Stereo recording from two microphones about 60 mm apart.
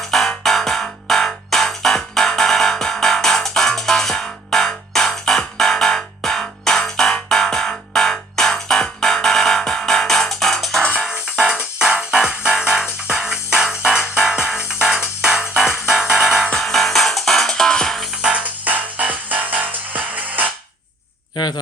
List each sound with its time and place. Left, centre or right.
0.1 s music: centre
11.1 s music: centre
18.2 s music: centre